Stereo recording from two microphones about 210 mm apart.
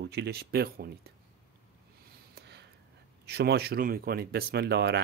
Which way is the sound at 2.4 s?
50° right (ahead or behind).